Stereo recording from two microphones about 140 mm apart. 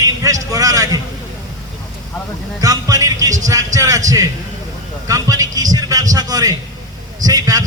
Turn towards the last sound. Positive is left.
turn(degrees=-25)  # may be behind; listen again after turning